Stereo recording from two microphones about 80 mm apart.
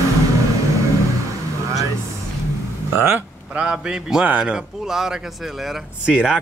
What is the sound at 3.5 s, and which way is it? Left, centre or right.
A man's voice, centre.